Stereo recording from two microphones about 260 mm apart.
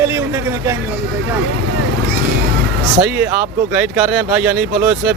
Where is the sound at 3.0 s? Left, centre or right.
Centre.